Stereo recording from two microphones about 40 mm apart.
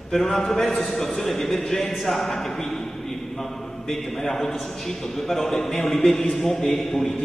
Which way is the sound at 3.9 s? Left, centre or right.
Centre.